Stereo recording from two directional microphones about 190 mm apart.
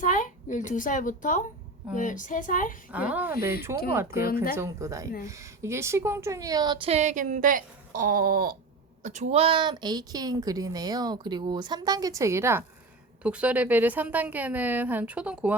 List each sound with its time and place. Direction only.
0.0 s a woman's voice: 45° left (ahead or behind)
2.9 s a woman's voice: 5° right (ahead or behind); by 8.5 s 50° right (ahead or behind)
9.0 s a woman's voice: 40° right (ahead or behind); by 15.5 s 5° right (ahead or behind)